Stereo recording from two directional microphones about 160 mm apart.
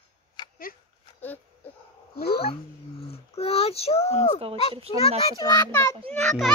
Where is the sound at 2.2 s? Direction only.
75° left (ahead or behind).